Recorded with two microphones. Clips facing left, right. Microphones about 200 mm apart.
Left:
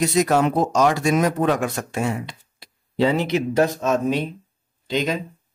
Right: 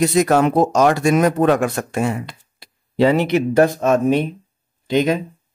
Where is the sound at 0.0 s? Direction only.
55° right (ahead or behind).